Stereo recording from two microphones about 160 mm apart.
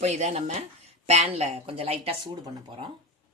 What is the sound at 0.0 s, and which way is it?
Speech, 45° right (ahead or behind).